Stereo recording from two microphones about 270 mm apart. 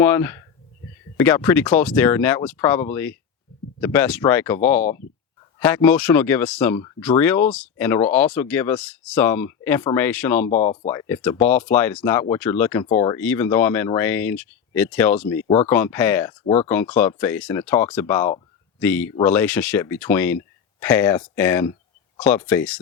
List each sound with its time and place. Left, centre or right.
0.0 s speech: centre
10.5 s speech: left
11.1 s speech: centre